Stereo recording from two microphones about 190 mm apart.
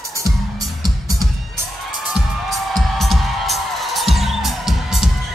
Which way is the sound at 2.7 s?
Centre (ahead or behind).